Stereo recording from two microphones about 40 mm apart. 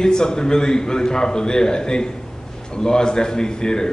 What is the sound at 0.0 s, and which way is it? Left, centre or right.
A man's voice, centre.